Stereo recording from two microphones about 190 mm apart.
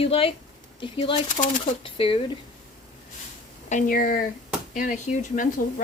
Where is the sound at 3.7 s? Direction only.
45° left (ahead or behind).